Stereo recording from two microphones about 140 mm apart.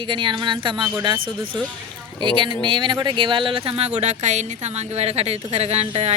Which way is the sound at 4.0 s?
55° right (ahead or behind).